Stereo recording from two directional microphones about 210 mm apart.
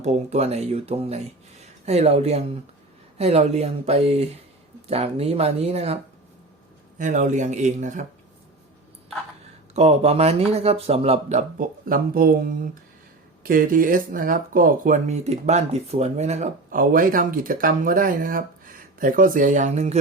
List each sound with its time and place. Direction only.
0.0 s speech: 30° right (ahead or behind)
7.0 s speech: 35° right (ahead or behind)
9.7 s speech: 30° right (ahead or behind)